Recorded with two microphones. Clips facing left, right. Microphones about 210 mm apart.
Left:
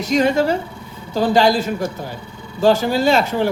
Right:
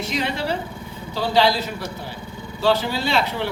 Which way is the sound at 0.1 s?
45° left (ahead or behind).